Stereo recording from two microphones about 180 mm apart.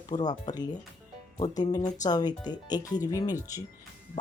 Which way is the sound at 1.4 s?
35° left (ahead or behind).